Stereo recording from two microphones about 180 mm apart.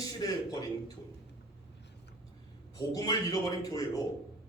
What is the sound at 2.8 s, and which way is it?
A man's voice, 20° left (ahead or behind).